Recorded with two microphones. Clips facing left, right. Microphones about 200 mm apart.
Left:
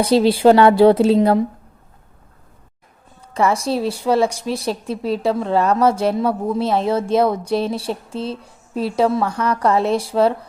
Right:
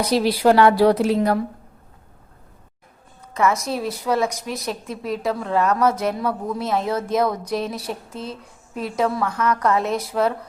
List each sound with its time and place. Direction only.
0.0 s a woman's voice: 30° left (ahead or behind)
3.3 s a woman's voice: 30° left (ahead or behind)